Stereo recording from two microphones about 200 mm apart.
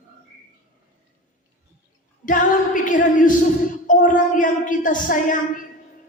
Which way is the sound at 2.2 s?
40° left (ahead or behind).